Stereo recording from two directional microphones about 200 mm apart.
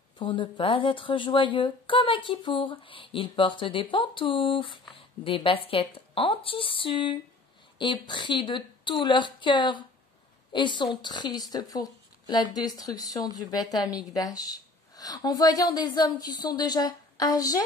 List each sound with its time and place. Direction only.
0.2 s a woman's voice: 25° left (ahead or behind)